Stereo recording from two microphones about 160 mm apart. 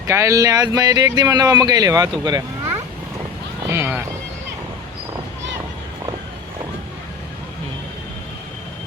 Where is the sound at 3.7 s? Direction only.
15° right (ahead or behind).